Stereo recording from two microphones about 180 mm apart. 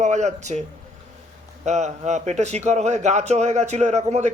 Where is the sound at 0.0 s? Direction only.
40° right (ahead or behind).